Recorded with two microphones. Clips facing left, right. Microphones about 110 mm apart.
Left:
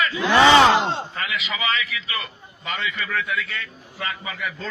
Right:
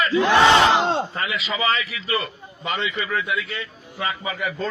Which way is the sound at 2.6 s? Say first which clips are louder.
Right 3 dB; 25° right (ahead or behind).